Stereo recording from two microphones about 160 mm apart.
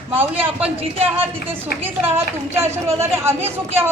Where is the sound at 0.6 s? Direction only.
40° right (ahead or behind).